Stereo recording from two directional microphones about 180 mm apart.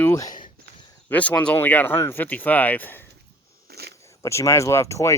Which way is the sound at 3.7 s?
60° right (ahead or behind).